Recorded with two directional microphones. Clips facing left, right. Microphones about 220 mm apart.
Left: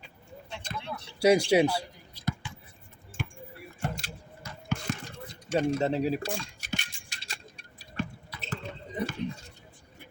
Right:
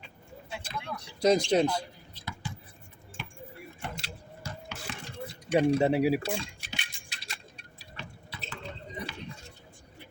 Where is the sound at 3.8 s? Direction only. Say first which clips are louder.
Left 6 dB; 40° left (ahead or behind).